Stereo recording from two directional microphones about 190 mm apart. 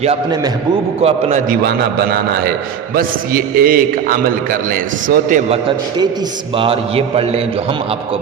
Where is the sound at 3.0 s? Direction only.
50° right (ahead or behind).